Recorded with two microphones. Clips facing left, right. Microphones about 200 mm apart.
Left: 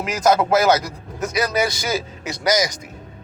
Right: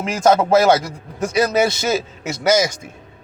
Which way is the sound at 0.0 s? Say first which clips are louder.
Right 2 dB; 25° right (ahead or behind).